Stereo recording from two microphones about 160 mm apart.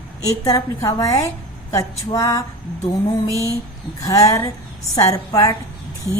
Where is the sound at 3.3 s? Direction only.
20° right (ahead or behind).